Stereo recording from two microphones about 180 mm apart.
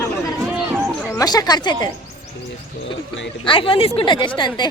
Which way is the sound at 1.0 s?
15° left (ahead or behind).